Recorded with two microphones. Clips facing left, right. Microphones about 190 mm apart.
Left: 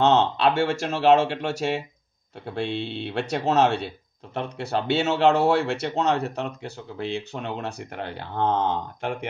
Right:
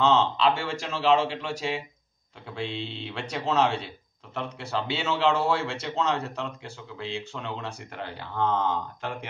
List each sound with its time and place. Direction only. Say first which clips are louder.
0.0 s speech: left 3 dB; 55° left (ahead or behind)
6.2 s speech: left 5 dB; 60° left (ahead or behind)